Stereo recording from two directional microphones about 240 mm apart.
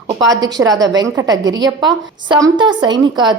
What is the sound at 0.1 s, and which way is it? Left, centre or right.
A woman's voice, centre.